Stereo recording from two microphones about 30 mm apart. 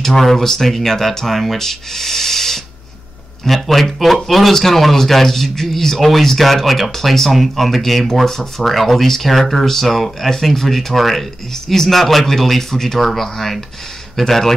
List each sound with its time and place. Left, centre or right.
0.0 s a man's voice: centre
11.5 s speech: centre
11.9 s speech: centre